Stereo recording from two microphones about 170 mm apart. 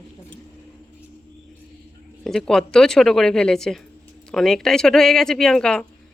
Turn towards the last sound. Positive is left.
turn(degrees=5)  # may be behind; listen again after turning